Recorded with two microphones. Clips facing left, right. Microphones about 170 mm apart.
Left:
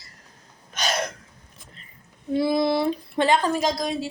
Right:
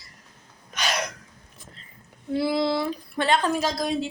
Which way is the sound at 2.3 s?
20° left (ahead or behind).